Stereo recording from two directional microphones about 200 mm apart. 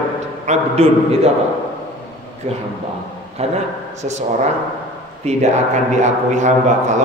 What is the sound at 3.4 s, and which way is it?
Speech, 30° right (ahead or behind).